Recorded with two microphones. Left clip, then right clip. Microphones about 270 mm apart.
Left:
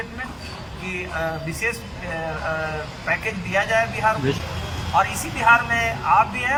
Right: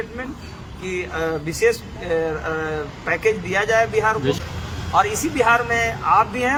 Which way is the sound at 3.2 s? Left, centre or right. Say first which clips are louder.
Right 3 dB; centre.